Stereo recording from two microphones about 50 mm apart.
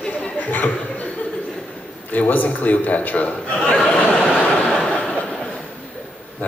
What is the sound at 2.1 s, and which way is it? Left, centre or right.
A man's voice, left.